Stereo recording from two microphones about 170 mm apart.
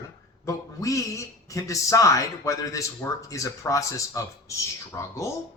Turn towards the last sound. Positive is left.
turn(degrees=15)  # may be behind; listen again after turning